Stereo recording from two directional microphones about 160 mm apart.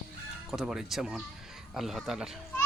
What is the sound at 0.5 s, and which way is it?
Speech, centre (ahead or behind).